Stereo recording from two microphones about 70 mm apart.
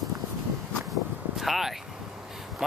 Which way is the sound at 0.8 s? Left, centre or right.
Centre.